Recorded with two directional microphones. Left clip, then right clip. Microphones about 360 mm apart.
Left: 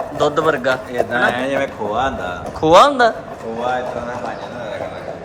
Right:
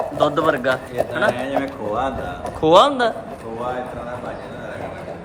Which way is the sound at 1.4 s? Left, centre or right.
Left.